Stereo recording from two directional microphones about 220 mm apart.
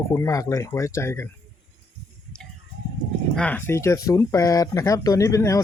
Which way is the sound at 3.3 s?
5° left (ahead or behind).